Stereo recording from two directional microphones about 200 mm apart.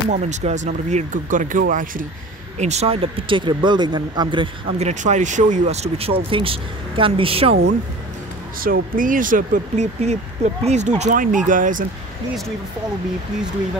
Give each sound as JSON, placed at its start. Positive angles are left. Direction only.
{"t": 0.1, "sound": "speech", "side_deg": -35}
{"t": 8.5, "sound": "speech", "side_deg": -45}